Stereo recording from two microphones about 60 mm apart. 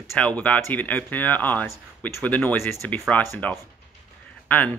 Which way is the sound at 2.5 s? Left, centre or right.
Left.